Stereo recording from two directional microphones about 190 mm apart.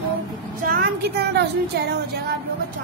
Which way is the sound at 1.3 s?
60° right (ahead or behind).